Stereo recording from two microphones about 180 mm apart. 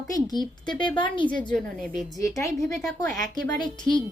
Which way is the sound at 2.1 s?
15° left (ahead or behind).